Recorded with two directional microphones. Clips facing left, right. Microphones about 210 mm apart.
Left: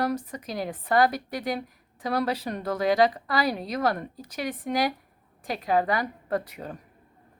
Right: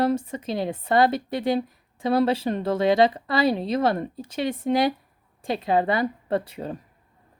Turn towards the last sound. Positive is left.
turn(degrees=-30)  # may be behind; listen again after turning